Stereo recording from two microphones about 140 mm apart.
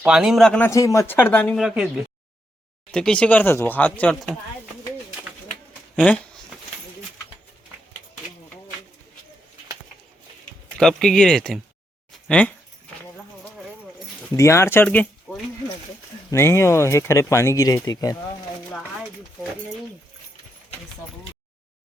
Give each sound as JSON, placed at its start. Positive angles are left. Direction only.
{"t": 0.0, "sound": "speech", "side_deg": -5}
{"t": 0.7, "sound": "speech", "side_deg": 20}
{"t": 1.5, "sound": "speech", "side_deg": -5}
{"t": 2.9, "sound": "speech", "side_deg": 5}
{"t": 4.1, "sound": "speech", "side_deg": 0}
{"t": 10.8, "sound": "speech", "side_deg": 5}
{"t": 14.3, "sound": "speech", "side_deg": 20}
{"t": 16.3, "sound": "speech", "side_deg": 20}